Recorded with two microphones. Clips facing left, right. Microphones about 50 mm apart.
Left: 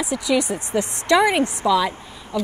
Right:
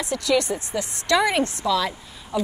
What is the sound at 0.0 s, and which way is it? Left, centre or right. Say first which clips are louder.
A woman's voice: left 1 dB; centre.